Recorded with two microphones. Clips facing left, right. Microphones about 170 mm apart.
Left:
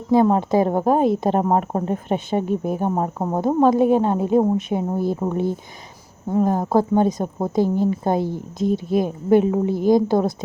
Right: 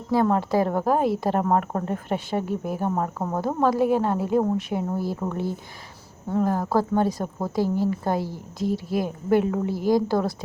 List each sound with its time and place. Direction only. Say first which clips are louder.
0.1 s speech: left 5 dB; 20° left (ahead or behind)